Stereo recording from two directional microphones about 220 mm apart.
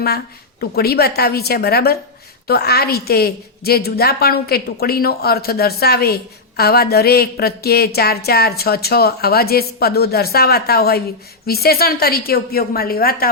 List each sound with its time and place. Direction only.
0.6 s speech: 45° left (ahead or behind)